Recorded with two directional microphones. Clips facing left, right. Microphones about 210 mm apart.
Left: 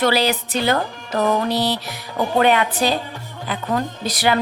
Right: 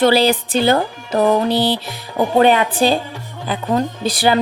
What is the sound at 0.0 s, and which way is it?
Speech, 30° right (ahead or behind).